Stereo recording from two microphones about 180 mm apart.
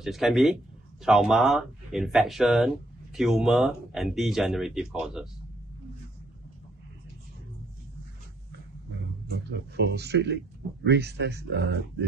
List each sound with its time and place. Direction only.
0.0 s speech: centre (ahead or behind)
9.3 s speech: 70° right (ahead or behind)